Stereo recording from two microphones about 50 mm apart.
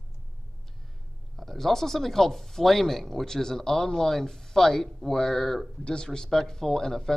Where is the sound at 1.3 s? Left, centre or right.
Centre.